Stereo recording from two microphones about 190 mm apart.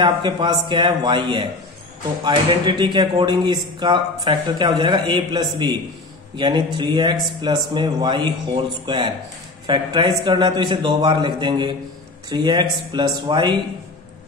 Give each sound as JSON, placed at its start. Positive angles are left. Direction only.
{"t": 0.0, "sound": "speech", "side_deg": -25}